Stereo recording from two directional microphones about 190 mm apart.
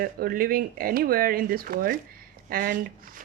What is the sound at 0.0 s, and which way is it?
Speech, 50° right (ahead or behind).